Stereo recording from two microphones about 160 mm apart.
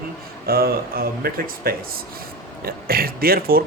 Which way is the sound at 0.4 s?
70° right (ahead or behind).